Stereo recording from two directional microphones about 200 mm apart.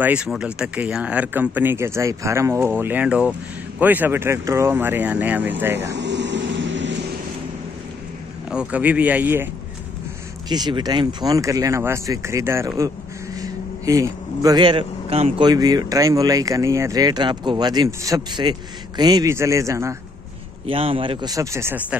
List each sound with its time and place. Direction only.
0.0 s speech: 5° right (ahead or behind)
5.9 s a sound: 60° right (ahead or behind)
8.5 s speech: 5° right (ahead or behind)
10.5 s speech: 20° right (ahead or behind)
20.6 s speech: 25° right (ahead or behind)